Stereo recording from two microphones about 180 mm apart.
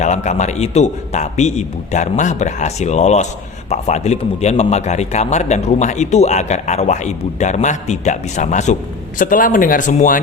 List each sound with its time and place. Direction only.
0.0 s a man's voice: 40° left (ahead or behind)